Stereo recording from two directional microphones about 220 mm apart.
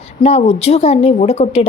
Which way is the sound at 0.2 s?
30° left (ahead or behind).